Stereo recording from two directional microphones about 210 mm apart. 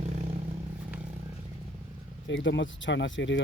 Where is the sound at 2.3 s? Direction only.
60° left (ahead or behind).